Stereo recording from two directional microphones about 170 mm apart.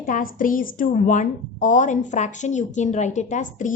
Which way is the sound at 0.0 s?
55° left (ahead or behind).